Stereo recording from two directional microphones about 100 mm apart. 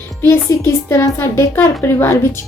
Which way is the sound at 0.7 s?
25° left (ahead or behind).